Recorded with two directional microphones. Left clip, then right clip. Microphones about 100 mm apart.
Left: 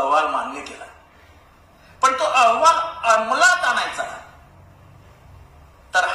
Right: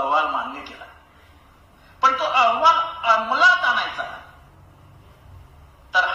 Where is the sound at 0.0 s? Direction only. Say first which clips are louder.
Left 2 dB; 40° left (ahead or behind).